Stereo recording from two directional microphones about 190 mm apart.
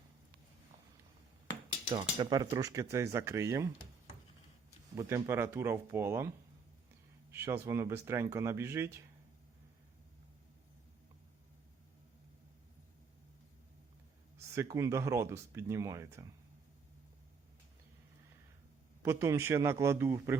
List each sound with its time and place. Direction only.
2.0 s speech: 20° right (ahead or behind)
4.9 s speech: 15° right (ahead or behind)
14.3 s speech: 15° right (ahead or behind)
19.0 s speech: 15° right (ahead or behind)